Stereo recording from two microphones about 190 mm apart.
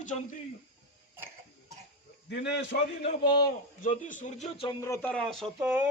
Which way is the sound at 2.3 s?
60° left (ahead or behind).